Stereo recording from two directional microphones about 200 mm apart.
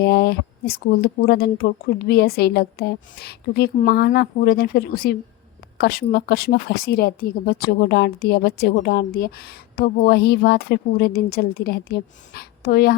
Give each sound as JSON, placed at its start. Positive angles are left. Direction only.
{"t": 0.0, "sound": "a woman's voice", "side_deg": 55}